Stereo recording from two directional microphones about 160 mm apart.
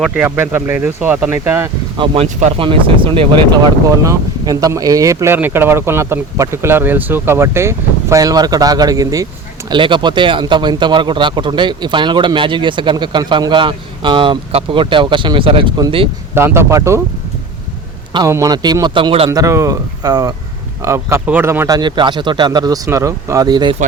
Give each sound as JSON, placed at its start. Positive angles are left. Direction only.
{"t": 0.0, "sound": "speech", "side_deg": -10}
{"t": 2.2, "sound": "speech", "side_deg": -45}
{"t": 2.6, "sound": "speech", "side_deg": -35}
{"t": 16.3, "sound": "speech", "side_deg": -15}
{"t": 18.3, "sound": "speech", "side_deg": -20}
{"t": 19.3, "sound": "speech", "side_deg": -20}
{"t": 21.8, "sound": "speech", "side_deg": -30}